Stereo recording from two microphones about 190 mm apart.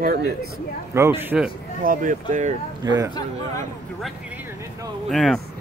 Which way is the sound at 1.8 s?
45° right (ahead or behind).